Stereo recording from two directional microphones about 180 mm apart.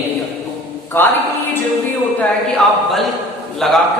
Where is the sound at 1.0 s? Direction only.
15° left (ahead or behind).